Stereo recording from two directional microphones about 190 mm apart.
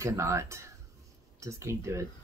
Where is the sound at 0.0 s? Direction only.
15° right (ahead or behind).